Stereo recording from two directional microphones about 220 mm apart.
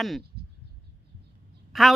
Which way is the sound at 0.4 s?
45° right (ahead or behind).